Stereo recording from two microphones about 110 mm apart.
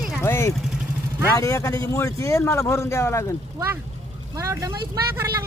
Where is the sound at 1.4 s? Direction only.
30° left (ahead or behind).